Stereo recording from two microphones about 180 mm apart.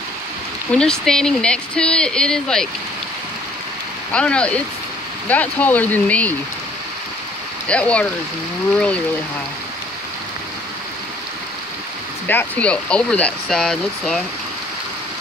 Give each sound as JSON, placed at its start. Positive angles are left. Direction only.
{"t": 0.7, "sound": "speech", "side_deg": 5}
{"t": 4.1, "sound": "speech", "side_deg": 5}
{"t": 7.6, "sound": "speech", "side_deg": 5}
{"t": 12.3, "sound": "speech", "side_deg": 10}